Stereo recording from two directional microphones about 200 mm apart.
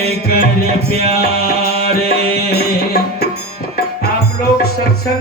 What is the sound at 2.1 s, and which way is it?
Music, 55° left (ahead or behind).